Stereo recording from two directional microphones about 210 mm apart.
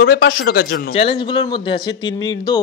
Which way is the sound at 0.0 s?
50° left (ahead or behind).